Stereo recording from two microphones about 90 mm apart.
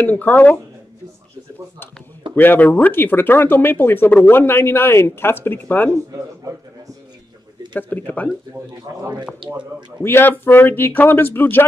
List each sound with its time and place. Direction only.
0.0 s speech: 20° left (ahead or behind)
2.3 s speech: 20° left (ahead or behind)
7.9 s speech: 15° left (ahead or behind)
8.9 s speech: 45° right (ahead or behind)
9.4 s speech: 65° right (ahead or behind)
10.0 s speech: 25° left (ahead or behind)